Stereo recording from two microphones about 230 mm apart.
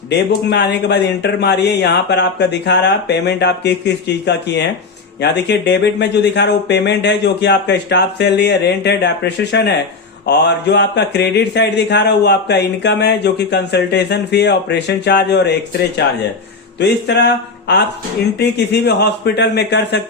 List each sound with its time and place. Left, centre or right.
0.1 s speech: left